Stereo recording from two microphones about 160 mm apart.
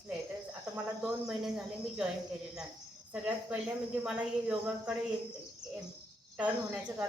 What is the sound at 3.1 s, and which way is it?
Speech, 10° right (ahead or behind).